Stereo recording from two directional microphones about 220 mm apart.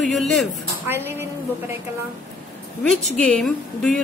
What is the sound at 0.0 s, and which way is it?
Speech, centre (ahead or behind).